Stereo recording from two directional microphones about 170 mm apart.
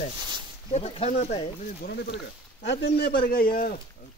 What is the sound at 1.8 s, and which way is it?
Speech, 70° left (ahead or behind).